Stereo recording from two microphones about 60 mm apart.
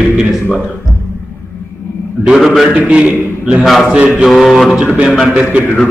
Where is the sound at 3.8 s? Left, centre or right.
Centre.